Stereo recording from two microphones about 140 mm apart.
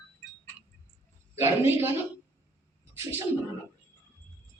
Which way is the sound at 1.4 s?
15° right (ahead or behind).